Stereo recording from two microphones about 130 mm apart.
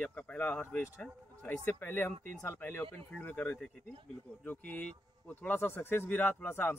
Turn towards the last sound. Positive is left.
turn(degrees=15)  # may be behind; listen again after turning